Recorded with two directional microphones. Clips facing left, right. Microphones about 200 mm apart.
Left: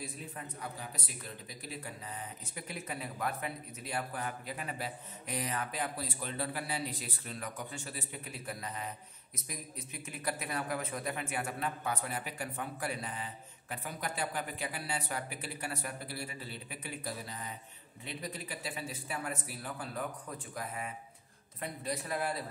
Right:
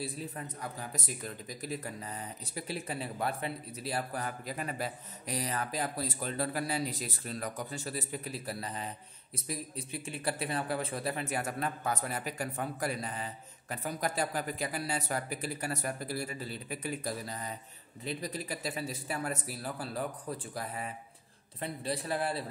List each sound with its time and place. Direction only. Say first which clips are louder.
0.6 s speech: right 3 dB; 45° right (ahead or behind)